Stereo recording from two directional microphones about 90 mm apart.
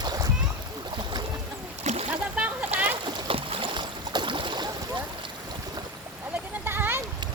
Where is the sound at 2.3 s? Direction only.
15° right (ahead or behind).